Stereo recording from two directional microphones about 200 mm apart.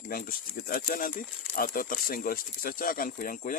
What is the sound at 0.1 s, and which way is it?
Speech, 45° left (ahead or behind).